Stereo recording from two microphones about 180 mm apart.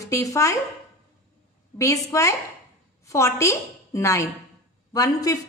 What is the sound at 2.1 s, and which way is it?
A woman's voice, 20° left (ahead or behind).